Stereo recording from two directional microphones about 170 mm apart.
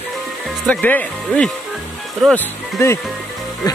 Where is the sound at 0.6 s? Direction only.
10° left (ahead or behind).